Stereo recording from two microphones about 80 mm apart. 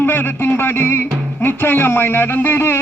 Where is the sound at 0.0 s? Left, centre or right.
Left.